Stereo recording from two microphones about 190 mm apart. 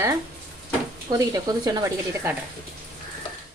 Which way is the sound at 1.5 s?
20° right (ahead or behind).